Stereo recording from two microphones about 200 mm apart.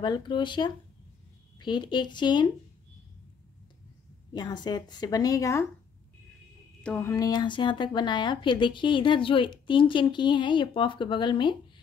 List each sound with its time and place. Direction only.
0.0 s a woman's voice: 20° left (ahead or behind)
4.3 s a woman's voice: 20° left (ahead or behind)
6.8 s a woman's voice: 10° left (ahead or behind); by 11.5 s 25° left (ahead or behind)